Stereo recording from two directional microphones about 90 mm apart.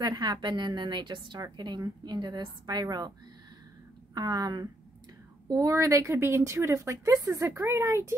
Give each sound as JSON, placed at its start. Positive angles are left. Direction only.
{"t": 0.0, "sound": "a woman's voice", "side_deg": -50}
{"t": 1.4, "sound": "a woman's voice", "side_deg": -50}
{"t": 4.1, "sound": "a woman's voice", "side_deg": -50}
{"t": 5.5, "sound": "speech", "side_deg": -35}